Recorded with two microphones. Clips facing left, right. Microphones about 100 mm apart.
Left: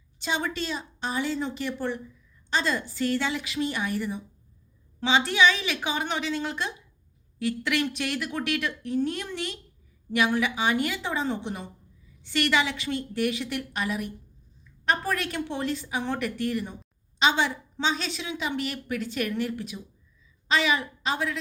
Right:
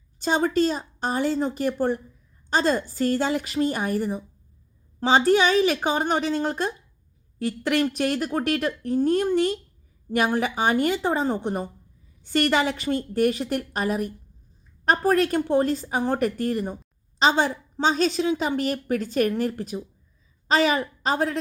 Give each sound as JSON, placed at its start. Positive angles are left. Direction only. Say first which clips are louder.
{"t": 0.2, "sound": "a woman's voice", "louder": "right 8 dB", "side_deg": -45}